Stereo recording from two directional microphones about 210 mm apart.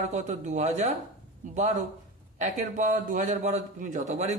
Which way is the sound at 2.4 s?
35° right (ahead or behind).